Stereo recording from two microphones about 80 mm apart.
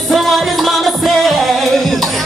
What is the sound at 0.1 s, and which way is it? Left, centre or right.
Music, centre.